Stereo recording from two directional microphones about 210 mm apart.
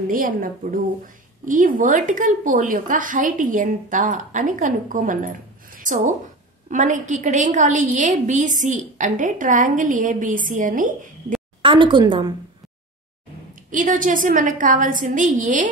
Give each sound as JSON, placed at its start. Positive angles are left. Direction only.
{"t": 0.1, "sound": "a woman's voice", "side_deg": -40}
{"t": 11.6, "sound": "speech", "side_deg": -25}
{"t": 13.7, "sound": "a woman's voice", "side_deg": -40}